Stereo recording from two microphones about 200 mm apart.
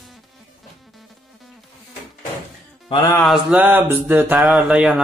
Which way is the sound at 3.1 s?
Centre (ahead or behind).